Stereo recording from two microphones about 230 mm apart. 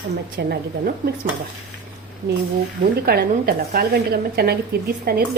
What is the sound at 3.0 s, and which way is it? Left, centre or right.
A woman's voice, right.